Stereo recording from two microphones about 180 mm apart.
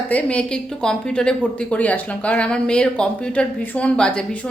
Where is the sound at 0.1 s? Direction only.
5° left (ahead or behind).